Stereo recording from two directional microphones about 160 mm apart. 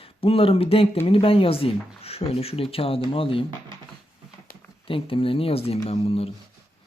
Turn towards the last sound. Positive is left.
turn(degrees=40)  # may be behind; listen again after turning